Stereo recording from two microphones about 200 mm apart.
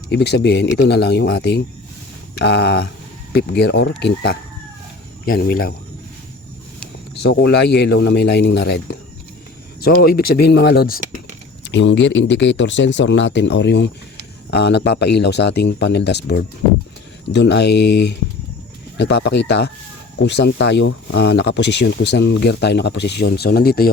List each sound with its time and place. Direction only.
0.1 s speech: 55° left (ahead or behind)
7.2 s speech: 55° left (ahead or behind)
11.7 s speech: 65° left (ahead or behind)